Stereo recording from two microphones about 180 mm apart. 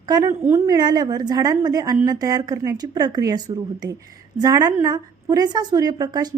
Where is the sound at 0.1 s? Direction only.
15° right (ahead or behind).